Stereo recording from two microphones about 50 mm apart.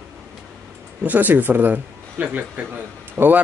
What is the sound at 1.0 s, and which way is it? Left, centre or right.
Speech, right.